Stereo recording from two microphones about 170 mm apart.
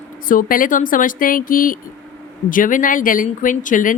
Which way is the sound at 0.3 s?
55° left (ahead or behind).